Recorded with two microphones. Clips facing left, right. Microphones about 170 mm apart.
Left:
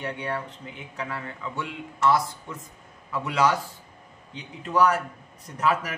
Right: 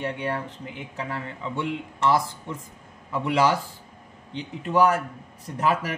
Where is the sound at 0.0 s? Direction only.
25° right (ahead or behind).